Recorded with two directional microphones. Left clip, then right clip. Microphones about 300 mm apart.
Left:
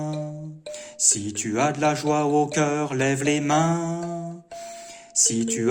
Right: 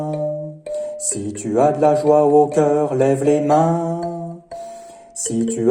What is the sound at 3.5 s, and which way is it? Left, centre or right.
Speech, left.